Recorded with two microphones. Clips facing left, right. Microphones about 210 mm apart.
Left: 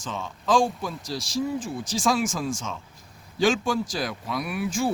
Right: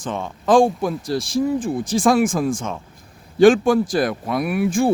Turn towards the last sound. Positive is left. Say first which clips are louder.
# right 8 dB
turn(degrees=-55)  # may be behind; listen again after turning